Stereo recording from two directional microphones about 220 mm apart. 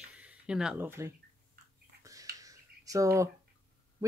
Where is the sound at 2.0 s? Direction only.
15° right (ahead or behind).